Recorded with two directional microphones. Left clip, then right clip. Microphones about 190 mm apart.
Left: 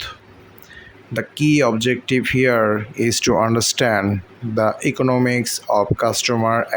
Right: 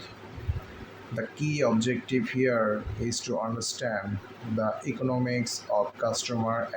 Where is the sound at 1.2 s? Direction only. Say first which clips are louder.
Left 12 dB; 50° left (ahead or behind).